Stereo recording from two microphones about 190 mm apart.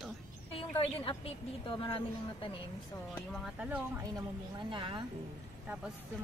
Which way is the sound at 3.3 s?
5° right (ahead or behind).